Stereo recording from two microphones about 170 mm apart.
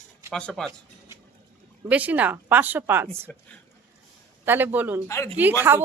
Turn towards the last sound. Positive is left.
turn(degrees=-15)  # may be behind; listen again after turning